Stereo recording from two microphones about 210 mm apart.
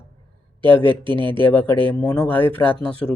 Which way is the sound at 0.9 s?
25° right (ahead or behind).